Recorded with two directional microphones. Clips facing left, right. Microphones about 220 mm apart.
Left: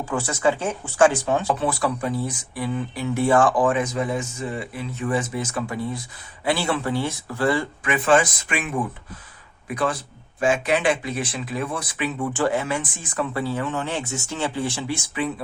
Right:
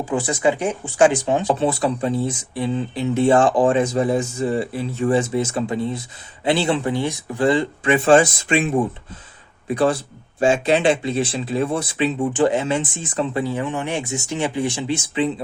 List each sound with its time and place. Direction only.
0.1 s speech: 15° right (ahead or behind)
7.9 s speech: 30° right (ahead or behind)